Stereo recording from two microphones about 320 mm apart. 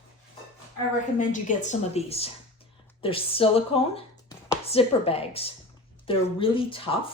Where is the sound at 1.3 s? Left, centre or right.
Left.